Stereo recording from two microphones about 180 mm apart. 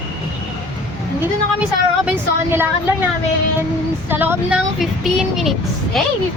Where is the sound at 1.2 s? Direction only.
10° right (ahead or behind).